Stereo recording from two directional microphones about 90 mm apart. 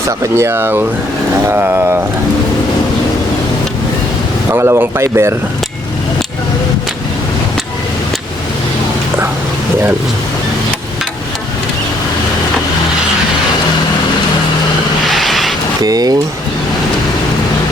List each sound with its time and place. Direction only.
0.2 s speech: 30° right (ahead or behind)
4.5 s speech: 30° right (ahead or behind)
15.1 s vehicle: centre (ahead or behind)
15.8 s speech: 45° right (ahead or behind)